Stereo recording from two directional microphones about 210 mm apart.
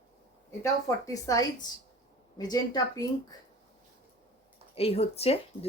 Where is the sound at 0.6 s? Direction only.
15° left (ahead or behind).